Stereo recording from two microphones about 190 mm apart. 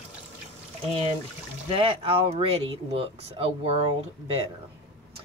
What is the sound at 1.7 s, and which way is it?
Speech, 30° right (ahead or behind).